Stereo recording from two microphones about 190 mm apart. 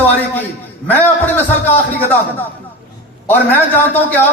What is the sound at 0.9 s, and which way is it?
Speech, 10° left (ahead or behind).